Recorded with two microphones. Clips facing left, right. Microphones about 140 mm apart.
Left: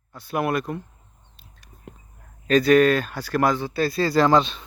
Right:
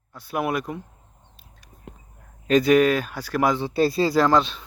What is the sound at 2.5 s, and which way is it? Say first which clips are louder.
Speech: left 1 dB; 15° right (ahead or behind).